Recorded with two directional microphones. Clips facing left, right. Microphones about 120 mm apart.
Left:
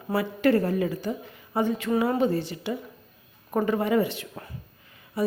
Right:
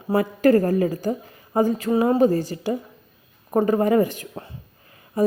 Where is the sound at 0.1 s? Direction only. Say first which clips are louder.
Right 5 dB; 40° right (ahead or behind).